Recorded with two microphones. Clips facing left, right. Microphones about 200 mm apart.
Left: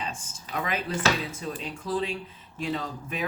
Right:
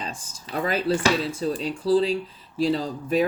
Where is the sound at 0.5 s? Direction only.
35° right (ahead or behind).